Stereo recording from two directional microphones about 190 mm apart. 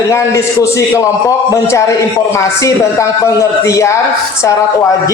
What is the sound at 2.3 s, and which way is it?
A man's voice, 15° left (ahead or behind).